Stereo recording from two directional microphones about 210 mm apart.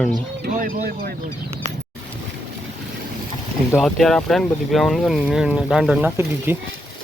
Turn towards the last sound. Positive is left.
turn(degrees=-10)  # may be behind; listen again after turning